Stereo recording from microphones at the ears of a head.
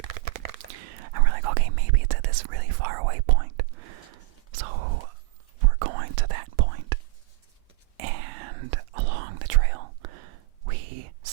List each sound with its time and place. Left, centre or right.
0.0 s whispering: right